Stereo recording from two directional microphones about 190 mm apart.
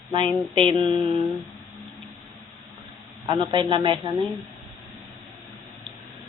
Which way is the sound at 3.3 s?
25° right (ahead or behind).